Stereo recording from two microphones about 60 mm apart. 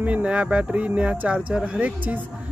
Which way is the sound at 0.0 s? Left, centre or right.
Right.